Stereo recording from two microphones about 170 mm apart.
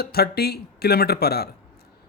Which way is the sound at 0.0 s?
70° left (ahead or behind).